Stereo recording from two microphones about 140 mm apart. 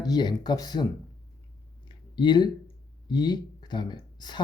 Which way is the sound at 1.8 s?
35° left (ahead or behind).